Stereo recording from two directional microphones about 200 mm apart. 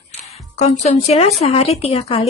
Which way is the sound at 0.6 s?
30° left (ahead or behind).